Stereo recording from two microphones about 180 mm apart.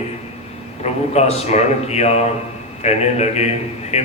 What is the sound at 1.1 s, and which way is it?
Speech, 35° left (ahead or behind).